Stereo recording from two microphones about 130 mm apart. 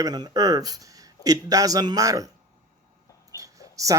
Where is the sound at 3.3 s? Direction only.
25° right (ahead or behind).